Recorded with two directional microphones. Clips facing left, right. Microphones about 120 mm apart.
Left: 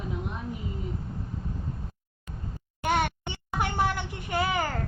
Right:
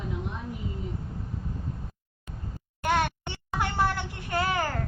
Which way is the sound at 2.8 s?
15° left (ahead or behind).